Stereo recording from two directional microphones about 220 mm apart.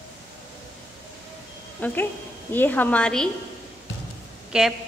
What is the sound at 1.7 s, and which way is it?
A woman's voice, 5° left (ahead or behind).